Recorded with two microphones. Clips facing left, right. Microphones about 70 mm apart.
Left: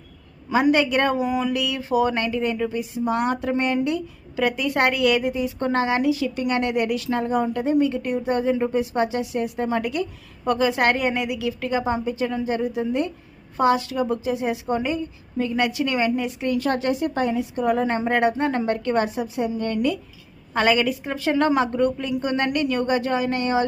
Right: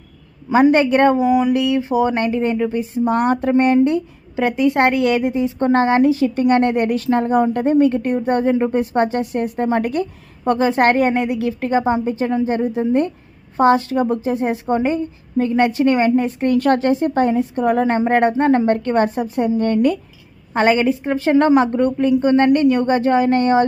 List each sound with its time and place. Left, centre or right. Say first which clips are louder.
0.5 s a woman's voice: right 6 dB; right
1.3 s speech: right 8 dB; centre
1.5 s a woman's voice: right 5 dB; right
20.5 s a woman's voice: right 5 dB; right